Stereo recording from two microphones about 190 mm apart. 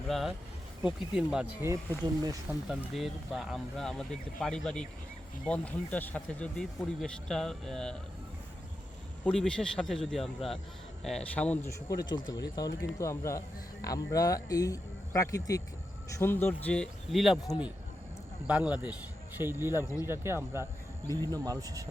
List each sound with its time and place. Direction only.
0.1 s speech: centre (ahead or behind)
1.6 s speech: 15° right (ahead or behind)
2.6 s speech: centre (ahead or behind)
9.2 s speech: 5° left (ahead or behind)
11.9 s speech: 20° left (ahead or behind); by 17.4 s centre (ahead or behind)
18.4 s speech: 5° right (ahead or behind)